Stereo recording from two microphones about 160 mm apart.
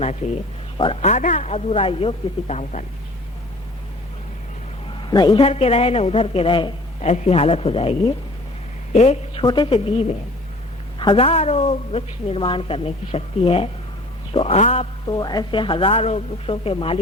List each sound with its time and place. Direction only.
1.0 s speech: 50° left (ahead or behind)
4.9 s a sound: 30° left (ahead or behind)
5.4 s a woman's voice: 40° left (ahead or behind)
7.0 s a woman's voice: 45° left (ahead or behind)
9.4 s a woman's voice: 30° left (ahead or behind)
15.0 s a woman's voice: 25° left (ahead or behind)